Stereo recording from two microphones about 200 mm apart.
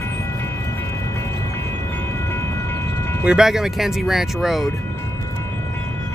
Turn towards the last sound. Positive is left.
turn(degrees=0)  # may be behind; listen again after turning